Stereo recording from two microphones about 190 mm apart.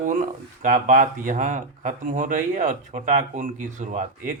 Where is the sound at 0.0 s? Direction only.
45° right (ahead or behind).